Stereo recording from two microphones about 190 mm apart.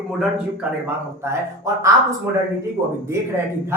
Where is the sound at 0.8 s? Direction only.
15° right (ahead or behind).